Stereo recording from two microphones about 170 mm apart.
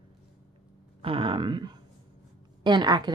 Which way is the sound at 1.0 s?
30° right (ahead or behind).